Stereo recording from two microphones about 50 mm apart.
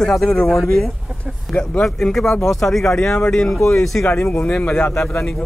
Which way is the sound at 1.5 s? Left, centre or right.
Centre.